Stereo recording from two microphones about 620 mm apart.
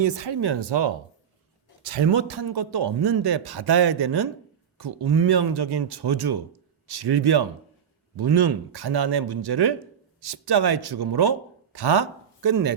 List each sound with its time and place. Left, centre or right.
0.0 s a man's voice: right